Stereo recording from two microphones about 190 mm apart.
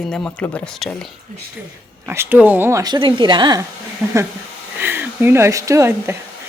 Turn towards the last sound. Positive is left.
turn(degrees=-15)  # may be behind; listen again after turning